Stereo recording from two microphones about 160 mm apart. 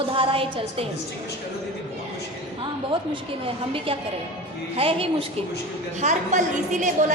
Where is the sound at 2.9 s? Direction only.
35° right (ahead or behind).